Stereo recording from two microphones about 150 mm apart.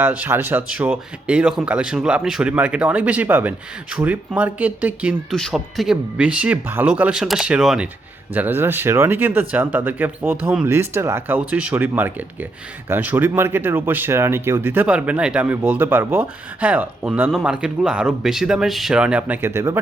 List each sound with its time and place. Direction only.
0.0 s speech: 10° right (ahead or behind)
5.3 s speech: centre (ahead or behind); by 19.8 s 15° right (ahead or behind)